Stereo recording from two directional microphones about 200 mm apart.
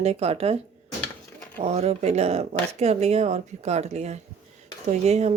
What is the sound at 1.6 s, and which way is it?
Speech, 30° right (ahead or behind).